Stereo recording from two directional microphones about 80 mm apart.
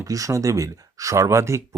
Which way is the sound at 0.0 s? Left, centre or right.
Right.